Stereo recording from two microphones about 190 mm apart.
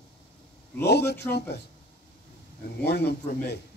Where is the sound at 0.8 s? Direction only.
60° left (ahead or behind).